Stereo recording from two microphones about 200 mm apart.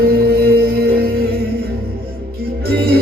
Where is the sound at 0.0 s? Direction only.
50° right (ahead or behind).